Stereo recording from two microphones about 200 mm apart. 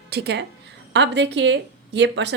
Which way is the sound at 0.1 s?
55° right (ahead or behind).